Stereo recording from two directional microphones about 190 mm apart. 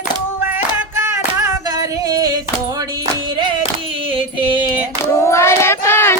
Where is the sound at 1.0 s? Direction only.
15° right (ahead or behind).